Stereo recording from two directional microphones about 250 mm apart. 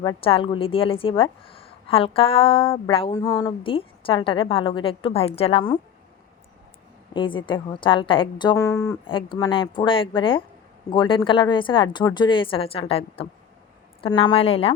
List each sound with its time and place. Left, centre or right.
0.0 s a woman's voice: centre
7.1 s a woman's voice: centre